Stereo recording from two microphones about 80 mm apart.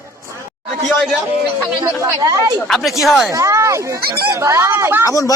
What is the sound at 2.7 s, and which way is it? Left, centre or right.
Speech, centre.